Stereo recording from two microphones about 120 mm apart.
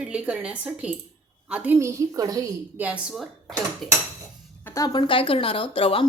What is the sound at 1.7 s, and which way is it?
Speech, 25° right (ahead or behind).